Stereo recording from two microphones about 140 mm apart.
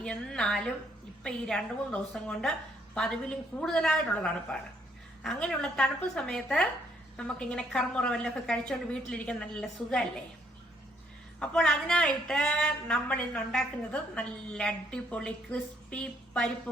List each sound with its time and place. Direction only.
0.0 s a woman's voice: 5° left (ahead or behind)
11.3 s speech: 5° left (ahead or behind)